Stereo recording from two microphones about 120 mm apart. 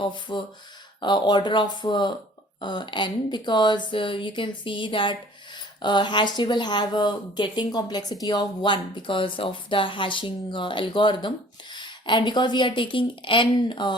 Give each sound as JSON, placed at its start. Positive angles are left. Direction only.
{"t": 0.0, "sound": "speech", "side_deg": 40}